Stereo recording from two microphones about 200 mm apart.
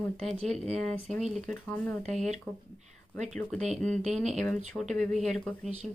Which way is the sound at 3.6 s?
5° left (ahead or behind).